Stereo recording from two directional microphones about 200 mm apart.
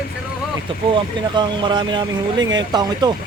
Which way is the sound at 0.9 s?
25° right (ahead or behind).